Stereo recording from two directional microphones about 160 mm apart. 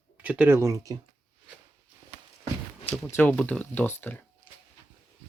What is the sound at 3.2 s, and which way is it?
Speech, 10° left (ahead or behind).